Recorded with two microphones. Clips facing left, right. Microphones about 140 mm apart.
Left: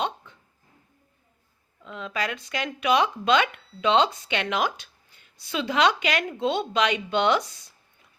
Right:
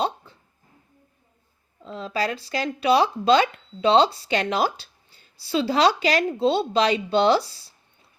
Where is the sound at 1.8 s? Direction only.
35° right (ahead or behind).